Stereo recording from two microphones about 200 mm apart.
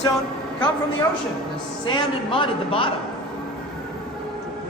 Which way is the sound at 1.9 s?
25° left (ahead or behind).